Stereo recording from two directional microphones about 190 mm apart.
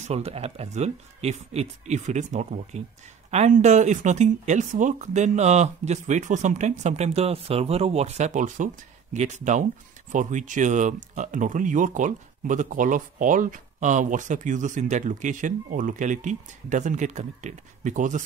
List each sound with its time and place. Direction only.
0.0 s speech: 30° right (ahead or behind)